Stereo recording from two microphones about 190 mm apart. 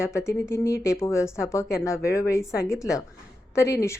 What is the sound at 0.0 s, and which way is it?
Speech, 15° left (ahead or behind).